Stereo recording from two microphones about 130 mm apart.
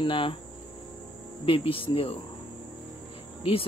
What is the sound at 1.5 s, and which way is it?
Speech, 45° left (ahead or behind).